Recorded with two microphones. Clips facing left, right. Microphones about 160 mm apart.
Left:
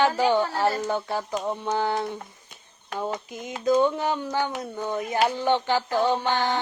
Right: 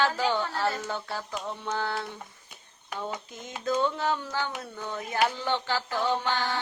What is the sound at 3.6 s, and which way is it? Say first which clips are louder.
Carnatic music: left 6 dB; 15° left (ahead or behind).